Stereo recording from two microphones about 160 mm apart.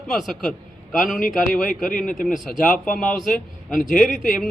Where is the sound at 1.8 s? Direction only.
60° left (ahead or behind).